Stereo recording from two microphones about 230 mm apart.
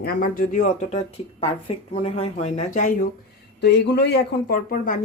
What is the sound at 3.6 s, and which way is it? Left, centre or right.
Speech, left.